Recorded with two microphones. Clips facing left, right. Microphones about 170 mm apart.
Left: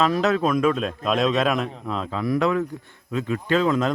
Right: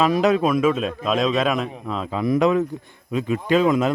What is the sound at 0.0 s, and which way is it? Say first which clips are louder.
A man's voice: right 3 dB; 15° right (ahead or behind).